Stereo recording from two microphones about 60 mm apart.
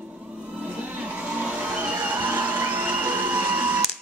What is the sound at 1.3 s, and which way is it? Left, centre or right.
Vehicle, centre.